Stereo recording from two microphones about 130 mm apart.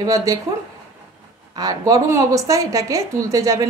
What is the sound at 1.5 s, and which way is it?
A woman's voice, 30° right (ahead or behind).